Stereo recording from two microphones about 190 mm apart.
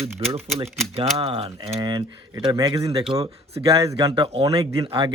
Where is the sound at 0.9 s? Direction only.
30° right (ahead or behind); by 3.0 s 15° right (ahead or behind).